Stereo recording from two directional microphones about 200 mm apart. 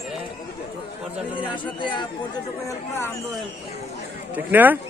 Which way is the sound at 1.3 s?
25° left (ahead or behind).